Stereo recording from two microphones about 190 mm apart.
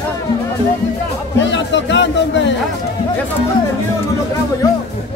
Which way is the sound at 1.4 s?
70° left (ahead or behind).